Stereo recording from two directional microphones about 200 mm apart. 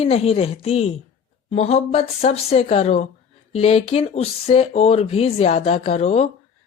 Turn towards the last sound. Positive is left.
turn(degrees=30)  # may be behind; listen again after turning